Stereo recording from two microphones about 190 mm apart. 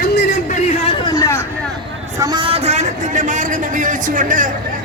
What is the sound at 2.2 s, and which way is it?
A man's voice, 20° right (ahead or behind).